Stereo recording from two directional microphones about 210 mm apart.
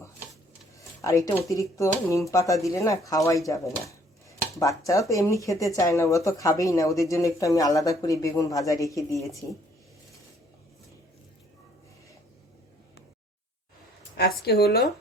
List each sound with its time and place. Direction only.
1.0 s speech: 15° left (ahead or behind)
3.8 s dishes: 15° left (ahead or behind)
4.8 s speech: 15° left (ahead or behind)
14.2 s a woman's voice: 50° left (ahead or behind)